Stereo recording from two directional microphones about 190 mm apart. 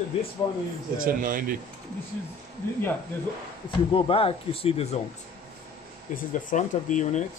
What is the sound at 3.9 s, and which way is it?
Speech, 30° left (ahead or behind).